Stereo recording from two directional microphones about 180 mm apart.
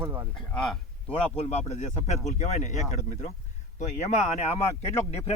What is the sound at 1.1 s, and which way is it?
Speech, 35° left (ahead or behind).